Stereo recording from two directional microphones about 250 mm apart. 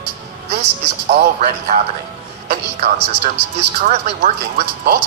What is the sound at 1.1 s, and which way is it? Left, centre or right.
Speech, right.